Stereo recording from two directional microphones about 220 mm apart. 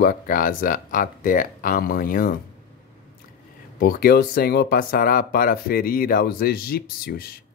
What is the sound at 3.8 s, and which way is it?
Speech, 45° left (ahead or behind).